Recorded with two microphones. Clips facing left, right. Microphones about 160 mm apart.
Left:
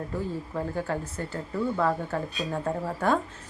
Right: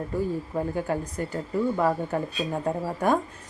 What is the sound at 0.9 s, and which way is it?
Speech, 15° right (ahead or behind).